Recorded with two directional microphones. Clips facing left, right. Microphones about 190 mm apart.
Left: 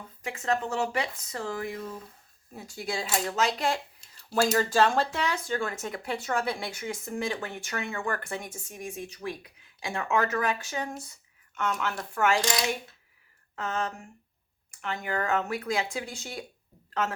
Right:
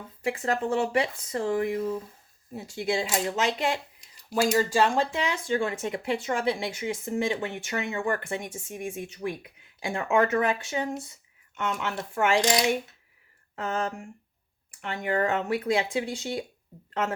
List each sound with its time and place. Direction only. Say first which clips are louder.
0.2 s speech: right 2 dB; 35° right (ahead or behind)